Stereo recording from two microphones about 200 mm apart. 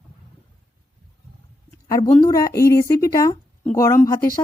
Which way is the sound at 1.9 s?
20° left (ahead or behind).